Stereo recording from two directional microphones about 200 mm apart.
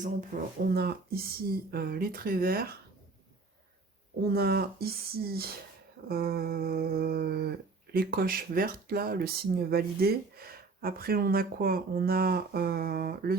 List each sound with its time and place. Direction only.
0.0 s speech: 45° right (ahead or behind)
4.3 s speech: 50° right (ahead or behind)